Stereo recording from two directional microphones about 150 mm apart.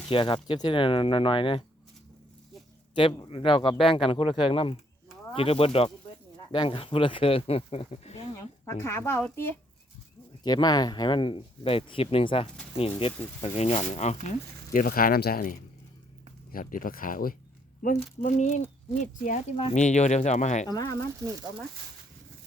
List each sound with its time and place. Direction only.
0.1 s speech: 35° left (ahead or behind)
2.9 s speech: 35° left (ahead or behind)
8.6 s speech: 15° left (ahead or behind)
10.4 s speech: 30° left (ahead or behind); by 17.3 s 70° left (ahead or behind)
18.2 s speech: 60° left (ahead or behind)
19.5 s speech: 45° left (ahead or behind)
20.7 s speech: 25° left (ahead or behind)
21.2 s speech: 20° right (ahead or behind)